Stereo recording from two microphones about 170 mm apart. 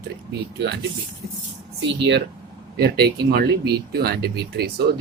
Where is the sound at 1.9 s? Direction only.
90° right.